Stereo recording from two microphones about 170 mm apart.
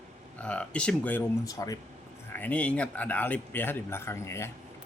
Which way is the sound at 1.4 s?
20° left (ahead or behind).